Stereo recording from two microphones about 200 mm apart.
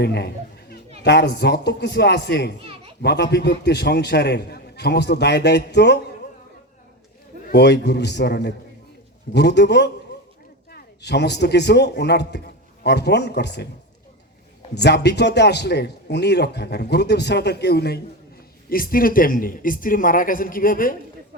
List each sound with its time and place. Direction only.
0.0 s chatter: 55° left (ahead or behind)
1.0 s a man's voice: 55° left (ahead or behind)
7.5 s a man's voice: 55° left (ahead or behind)
14.8 s a man's voice: 55° left (ahead or behind)